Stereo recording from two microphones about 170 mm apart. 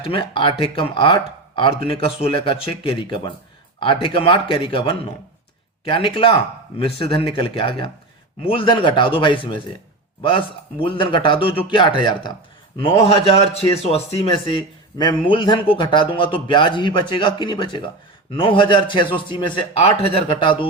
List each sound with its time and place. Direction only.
0.0 s speech: 30° left (ahead or behind)
13.0 s speech: 35° left (ahead or behind)